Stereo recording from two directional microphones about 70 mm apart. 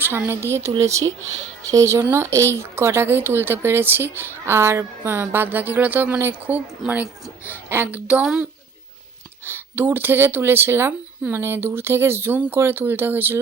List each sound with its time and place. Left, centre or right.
0.0 s speech: right
5.1 s speech: right
9.4 s speech: right